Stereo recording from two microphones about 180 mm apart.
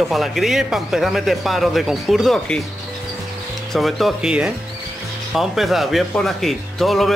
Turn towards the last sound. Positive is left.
turn(degrees=0)  # may be behind; listen again after turning